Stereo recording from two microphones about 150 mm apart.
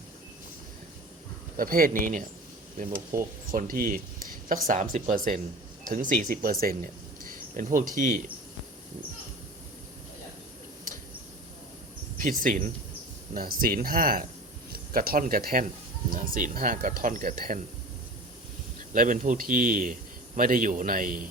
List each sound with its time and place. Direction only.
1.5 s speech: 70° right (ahead or behind)
12.4 s a man's voice: 65° right (ahead or behind)
18.9 s a man's voice: 60° right (ahead or behind)